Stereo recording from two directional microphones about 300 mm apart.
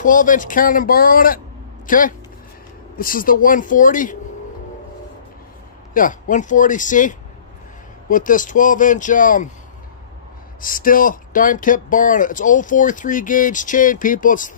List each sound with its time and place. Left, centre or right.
0.0 s speech: left
5.9 s speech: left
10.6 s speech: left